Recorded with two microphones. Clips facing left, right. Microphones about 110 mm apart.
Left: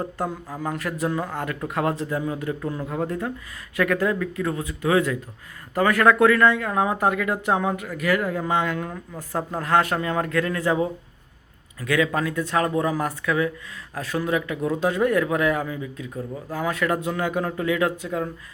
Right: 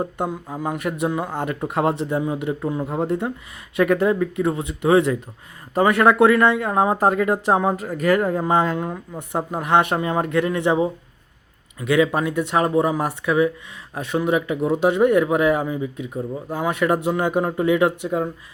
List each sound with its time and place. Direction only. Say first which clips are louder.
0.0 s speech: right 3 dB; 25° right (ahead or behind)